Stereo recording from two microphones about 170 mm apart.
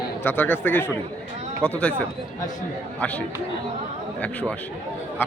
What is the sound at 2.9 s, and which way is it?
Speech, 10° left (ahead or behind).